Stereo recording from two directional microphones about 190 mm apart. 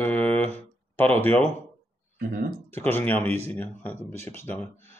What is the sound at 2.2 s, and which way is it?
Speech, 50° right (ahead or behind).